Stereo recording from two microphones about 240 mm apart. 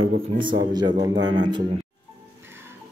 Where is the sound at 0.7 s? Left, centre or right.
Centre.